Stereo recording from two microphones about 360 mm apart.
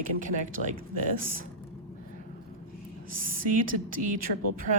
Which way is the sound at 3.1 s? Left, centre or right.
Right.